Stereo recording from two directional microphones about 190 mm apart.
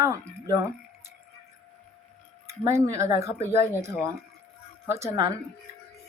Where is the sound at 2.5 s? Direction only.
15° right (ahead or behind).